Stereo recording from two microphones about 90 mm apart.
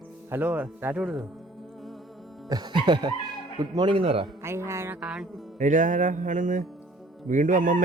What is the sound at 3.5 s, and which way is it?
Speech, 55° right (ahead or behind).